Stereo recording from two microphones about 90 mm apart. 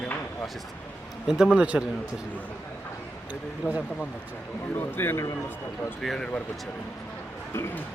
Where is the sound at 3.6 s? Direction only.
20° left (ahead or behind).